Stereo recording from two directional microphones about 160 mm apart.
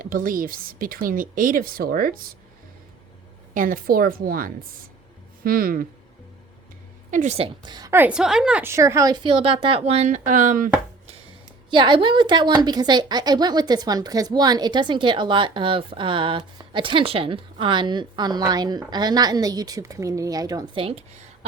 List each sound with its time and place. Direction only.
0.0 s speech: 60° right (ahead or behind)
3.5 s speech: 60° right (ahead or behind)
7.1 s a woman's voice: 50° right (ahead or behind)
7.3 s a woman's voice: 30° right (ahead or behind)
7.9 s a woman's voice: 10° right (ahead or behind); by 11.1 s 50° right (ahead or behind)
11.7 s a woman's voice: 30° right (ahead or behind)